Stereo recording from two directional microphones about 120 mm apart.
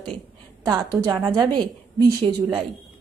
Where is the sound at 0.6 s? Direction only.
30° right (ahead or behind).